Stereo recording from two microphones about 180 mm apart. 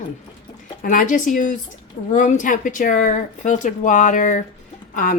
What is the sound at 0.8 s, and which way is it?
Speech, 50° left (ahead or behind).